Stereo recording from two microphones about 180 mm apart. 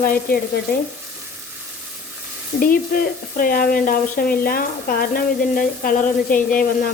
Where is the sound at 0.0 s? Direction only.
55° left (ahead or behind).